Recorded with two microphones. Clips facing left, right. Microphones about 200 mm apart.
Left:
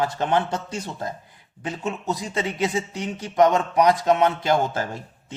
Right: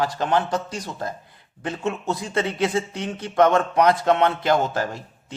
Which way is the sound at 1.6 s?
15° left (ahead or behind).